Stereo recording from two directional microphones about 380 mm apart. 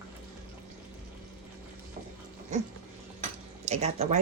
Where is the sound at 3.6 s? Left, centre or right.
Centre.